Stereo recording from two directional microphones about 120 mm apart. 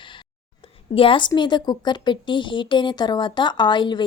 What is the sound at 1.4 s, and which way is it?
Speech, 40° left (ahead or behind).